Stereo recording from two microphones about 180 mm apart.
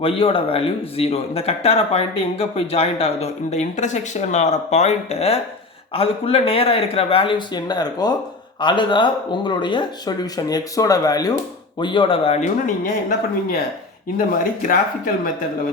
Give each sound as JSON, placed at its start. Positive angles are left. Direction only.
{"t": 0.0, "sound": "speech", "side_deg": 30}